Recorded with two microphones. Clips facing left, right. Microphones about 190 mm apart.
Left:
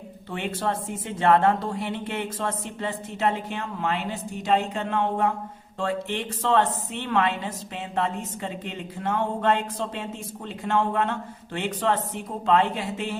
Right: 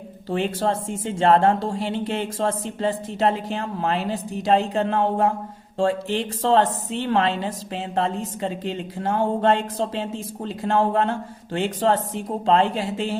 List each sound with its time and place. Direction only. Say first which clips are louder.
0.3 s speech: right 5 dB; 35° right (ahead or behind)